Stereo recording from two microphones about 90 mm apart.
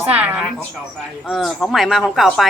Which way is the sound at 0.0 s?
20° right (ahead or behind).